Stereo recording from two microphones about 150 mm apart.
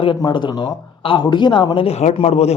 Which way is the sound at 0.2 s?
30° left (ahead or behind).